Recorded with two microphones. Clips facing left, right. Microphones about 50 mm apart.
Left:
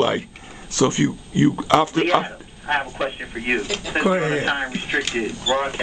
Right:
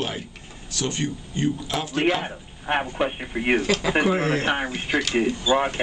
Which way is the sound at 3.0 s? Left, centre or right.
Centre.